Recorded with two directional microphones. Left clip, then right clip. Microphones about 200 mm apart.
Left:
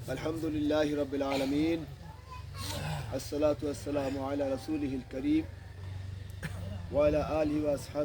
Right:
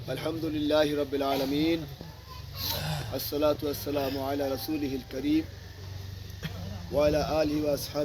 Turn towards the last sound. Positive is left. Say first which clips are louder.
# right 3 dB
turn(degrees=-20)  # may be behind; listen again after turning